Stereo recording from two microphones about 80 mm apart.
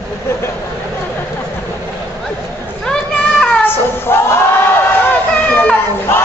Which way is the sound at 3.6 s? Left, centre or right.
Left.